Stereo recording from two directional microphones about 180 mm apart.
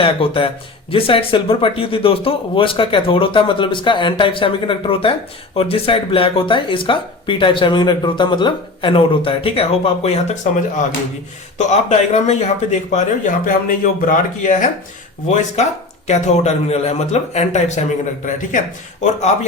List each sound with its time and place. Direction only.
0.0 s a man's voice: 30° left (ahead or behind)